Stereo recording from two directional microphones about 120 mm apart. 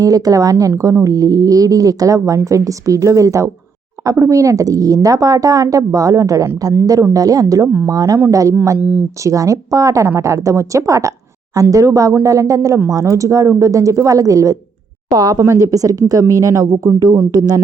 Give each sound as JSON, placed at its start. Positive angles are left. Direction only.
{"t": 0.0, "sound": "speech", "side_deg": -30}
{"t": 8.8, "sound": "speech", "side_deg": -15}
{"t": 9.2, "sound": "speech", "side_deg": -25}